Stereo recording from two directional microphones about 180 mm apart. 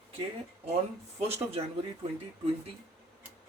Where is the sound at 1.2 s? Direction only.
35° right (ahead or behind).